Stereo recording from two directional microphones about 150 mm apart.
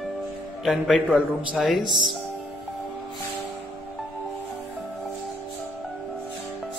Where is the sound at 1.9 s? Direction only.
30° right (ahead or behind).